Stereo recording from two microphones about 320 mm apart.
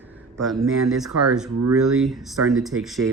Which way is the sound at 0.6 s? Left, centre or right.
Right.